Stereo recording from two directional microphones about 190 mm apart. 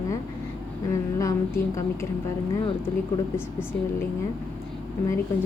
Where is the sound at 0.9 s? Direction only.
20° left (ahead or behind).